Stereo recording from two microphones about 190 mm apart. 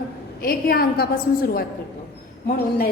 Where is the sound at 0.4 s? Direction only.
50° left (ahead or behind).